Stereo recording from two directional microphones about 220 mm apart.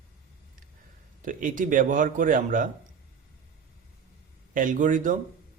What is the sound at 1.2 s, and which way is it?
A man's voice, 35° right (ahead or behind).